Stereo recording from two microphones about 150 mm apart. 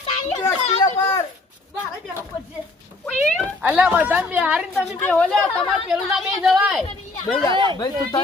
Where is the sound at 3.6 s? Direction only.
5° right (ahead or behind).